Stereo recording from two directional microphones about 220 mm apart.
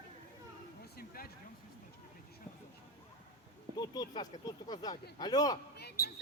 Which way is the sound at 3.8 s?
20° left (ahead or behind).